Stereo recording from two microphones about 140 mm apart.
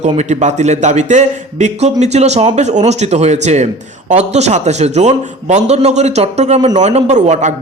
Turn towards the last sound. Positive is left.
turn(degrees=-55)  # may be behind; listen again after turning